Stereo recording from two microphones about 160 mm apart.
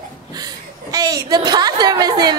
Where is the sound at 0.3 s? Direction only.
25° right (ahead or behind).